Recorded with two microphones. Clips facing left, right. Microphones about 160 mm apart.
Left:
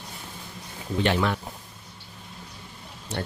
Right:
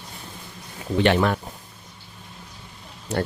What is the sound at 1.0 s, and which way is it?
Speech, 65° right (ahead or behind).